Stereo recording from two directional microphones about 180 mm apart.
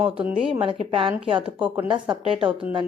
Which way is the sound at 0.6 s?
30° right (ahead or behind).